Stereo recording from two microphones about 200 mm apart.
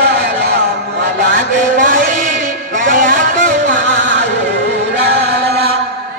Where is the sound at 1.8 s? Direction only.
40° right (ahead or behind).